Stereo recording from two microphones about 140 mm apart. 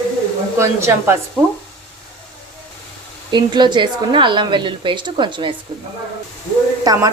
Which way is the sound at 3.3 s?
30° right (ahead or behind).